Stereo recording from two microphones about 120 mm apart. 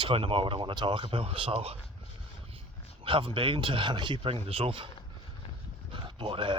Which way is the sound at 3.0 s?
45° right (ahead or behind).